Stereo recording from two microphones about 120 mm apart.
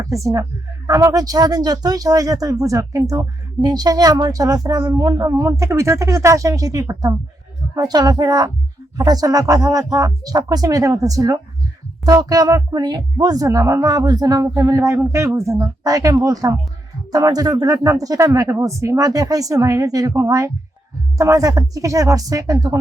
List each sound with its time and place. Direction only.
0.0 s speech: 25° right (ahead or behind)